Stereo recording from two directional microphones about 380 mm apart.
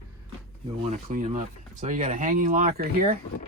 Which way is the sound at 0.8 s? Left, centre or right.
Centre.